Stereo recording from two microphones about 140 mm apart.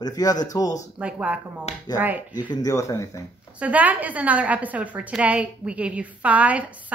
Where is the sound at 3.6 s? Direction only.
10° right (ahead or behind).